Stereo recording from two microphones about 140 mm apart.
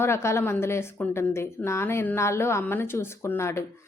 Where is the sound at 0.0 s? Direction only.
20° left (ahead or behind).